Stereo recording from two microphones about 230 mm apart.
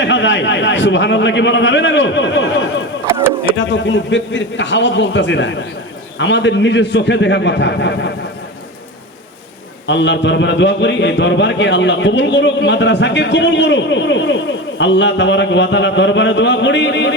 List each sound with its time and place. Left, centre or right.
0.0 s a man's voice: left
3.1 s speech: centre
3.6 s a man's voice: left
9.8 s a man's voice: left